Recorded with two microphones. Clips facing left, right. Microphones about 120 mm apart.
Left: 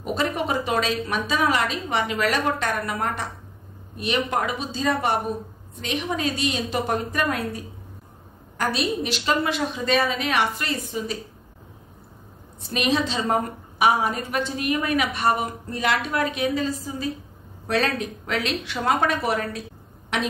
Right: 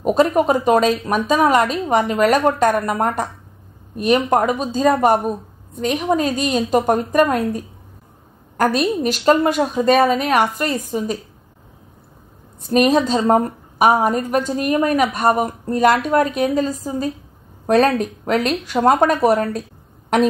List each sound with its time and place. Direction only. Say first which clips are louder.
0.0 s a woman's voice: right 10 dB; 40° right (ahead or behind)
12.6 s a woman's voice: right 8 dB; 45° right (ahead or behind)